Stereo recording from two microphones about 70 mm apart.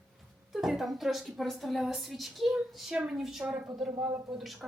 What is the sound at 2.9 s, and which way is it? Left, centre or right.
Speech, centre.